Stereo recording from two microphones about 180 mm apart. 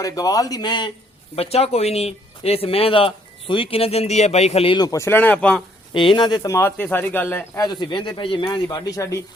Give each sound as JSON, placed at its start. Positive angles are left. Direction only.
{"t": 0.0, "sound": "a man's voice", "side_deg": 20}
{"t": 5.9, "sound": "speech", "side_deg": 25}
{"t": 7.7, "sound": "a man's voice", "side_deg": 25}